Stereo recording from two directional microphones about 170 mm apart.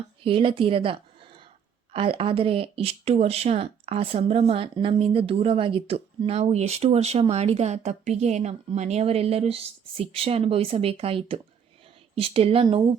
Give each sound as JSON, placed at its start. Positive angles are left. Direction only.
{"t": 0.2, "sound": "speech", "side_deg": -30}